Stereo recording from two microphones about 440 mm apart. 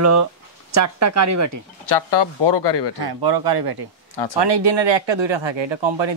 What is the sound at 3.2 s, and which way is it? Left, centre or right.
Speech, right.